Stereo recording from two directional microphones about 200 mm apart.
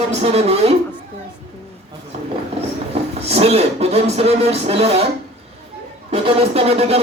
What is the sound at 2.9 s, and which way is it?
Speech, 30° right (ahead or behind).